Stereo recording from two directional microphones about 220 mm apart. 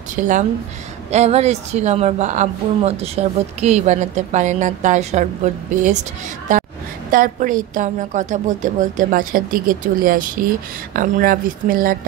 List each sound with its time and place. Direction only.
0.1 s a woman's voice: 35° right (ahead or behind)
6.5 s a sound: 35° right (ahead or behind)
7.1 s a woman's voice: 40° right (ahead or behind)